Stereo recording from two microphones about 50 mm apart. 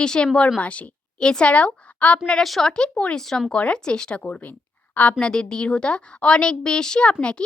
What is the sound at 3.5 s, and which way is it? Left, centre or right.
A woman's voice, centre.